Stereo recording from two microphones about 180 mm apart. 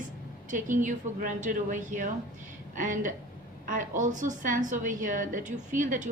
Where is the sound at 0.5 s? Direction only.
45° right (ahead or behind).